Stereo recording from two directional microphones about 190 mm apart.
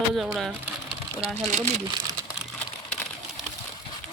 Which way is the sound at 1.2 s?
40° right (ahead or behind).